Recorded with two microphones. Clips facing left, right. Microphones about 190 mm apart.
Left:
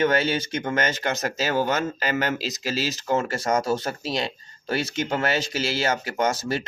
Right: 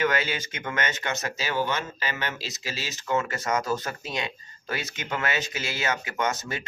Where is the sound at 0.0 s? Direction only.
30° left (ahead or behind).